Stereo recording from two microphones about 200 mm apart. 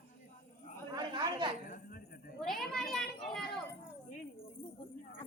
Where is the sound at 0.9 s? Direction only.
20° right (ahead or behind).